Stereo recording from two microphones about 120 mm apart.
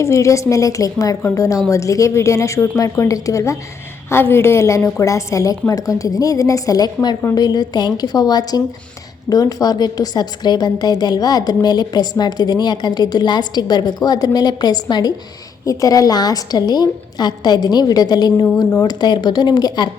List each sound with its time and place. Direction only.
0.0 s a woman's voice: 25° left (ahead or behind)
7.2 s a woman's voice: 20° left (ahead or behind)
7.4 s a woman's voice: 35° left (ahead or behind)